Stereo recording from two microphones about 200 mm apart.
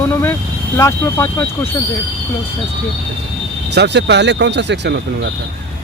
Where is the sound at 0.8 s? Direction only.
15° left (ahead or behind).